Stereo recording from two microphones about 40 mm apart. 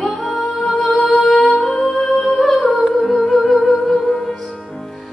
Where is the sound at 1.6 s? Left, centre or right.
Centre.